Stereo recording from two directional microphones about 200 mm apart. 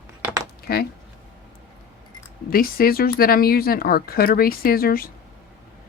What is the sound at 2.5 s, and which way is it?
Speech, 45° left (ahead or behind).